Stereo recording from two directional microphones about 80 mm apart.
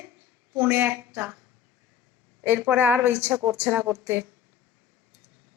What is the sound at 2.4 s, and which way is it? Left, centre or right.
Speech, right.